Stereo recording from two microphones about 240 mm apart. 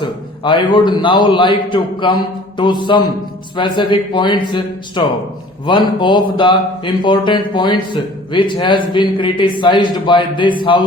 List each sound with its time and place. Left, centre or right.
0.0 s a man's voice: centre